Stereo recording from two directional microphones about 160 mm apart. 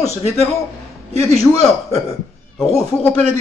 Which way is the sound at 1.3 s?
40° left (ahead or behind).